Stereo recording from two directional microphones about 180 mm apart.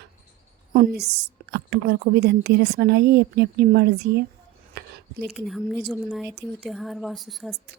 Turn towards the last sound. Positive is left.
turn(degrees=0)  # may be behind; listen again after turning